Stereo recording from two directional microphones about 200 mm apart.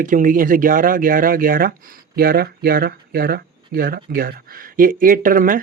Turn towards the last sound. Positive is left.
turn(degrees=-45)  # may be behind; listen again after turning